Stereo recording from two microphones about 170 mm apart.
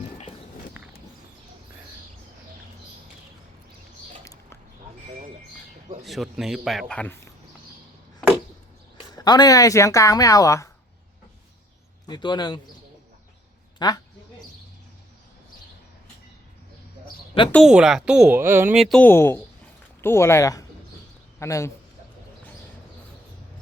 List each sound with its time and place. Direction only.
0.0 s walk: 40° left (ahead or behind)
4.2 s a sound: 15° left (ahead or behind)
6.0 s speech: centre (ahead or behind)
9.1 s speech: 25° left (ahead or behind)
12.0 s speech: 25° left (ahead or behind)
13.7 s a woman's voice: 25° left (ahead or behind)
17.5 s speech: centre (ahead or behind)
18.8 s a man's voice: 5° left (ahead or behind)